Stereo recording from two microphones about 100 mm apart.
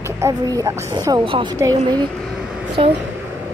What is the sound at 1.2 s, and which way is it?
Speech, 60° right (ahead or behind).